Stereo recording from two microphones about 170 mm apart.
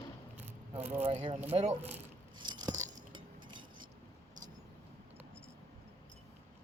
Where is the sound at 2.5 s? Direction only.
25° right (ahead or behind).